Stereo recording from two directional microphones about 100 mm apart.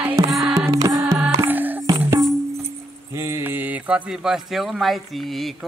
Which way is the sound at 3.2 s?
25° right (ahead or behind).